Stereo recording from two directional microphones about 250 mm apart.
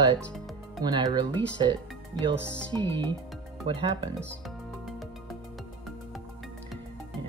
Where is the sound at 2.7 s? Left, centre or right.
Centre.